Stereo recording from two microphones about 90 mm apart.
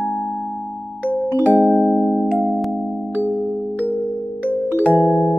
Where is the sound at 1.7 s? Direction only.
5° right (ahead or behind).